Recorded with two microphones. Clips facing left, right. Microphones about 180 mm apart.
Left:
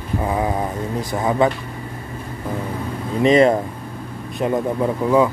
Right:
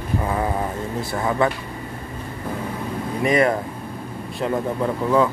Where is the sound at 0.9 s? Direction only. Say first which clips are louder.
Left 3 dB; 15° left (ahead or behind).